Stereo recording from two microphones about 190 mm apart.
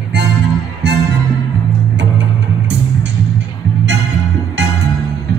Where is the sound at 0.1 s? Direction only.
65° right (ahead or behind).